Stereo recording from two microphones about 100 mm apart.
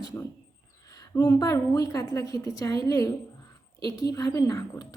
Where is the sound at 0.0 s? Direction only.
35° left (ahead or behind).